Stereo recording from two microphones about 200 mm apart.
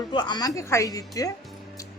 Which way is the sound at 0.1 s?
20° left (ahead or behind).